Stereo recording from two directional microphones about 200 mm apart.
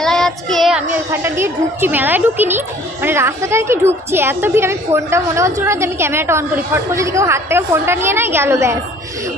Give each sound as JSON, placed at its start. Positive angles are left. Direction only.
{"t": 0.0, "sound": "a child's voice", "side_deg": 0}